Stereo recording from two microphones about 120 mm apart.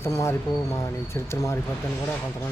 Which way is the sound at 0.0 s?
25° left (ahead or behind).